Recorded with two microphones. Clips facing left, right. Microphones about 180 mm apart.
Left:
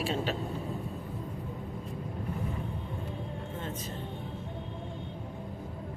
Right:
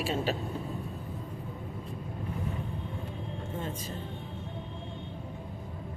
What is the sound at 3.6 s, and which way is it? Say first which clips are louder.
Vehicle: right 2 dB; 10° right (ahead or behind).